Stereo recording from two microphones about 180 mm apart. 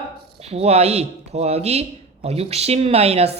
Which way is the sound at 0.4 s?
35° right (ahead or behind).